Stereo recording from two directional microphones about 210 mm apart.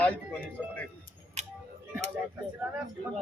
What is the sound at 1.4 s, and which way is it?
Music, 35° right (ahead or behind).